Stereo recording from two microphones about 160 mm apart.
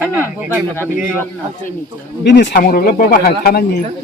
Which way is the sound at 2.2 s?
90° left.